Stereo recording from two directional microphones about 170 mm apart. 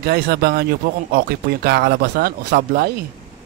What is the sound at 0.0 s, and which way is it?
Speech, 65° right (ahead or behind).